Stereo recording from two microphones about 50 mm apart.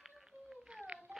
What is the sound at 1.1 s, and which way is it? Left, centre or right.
Tap, right.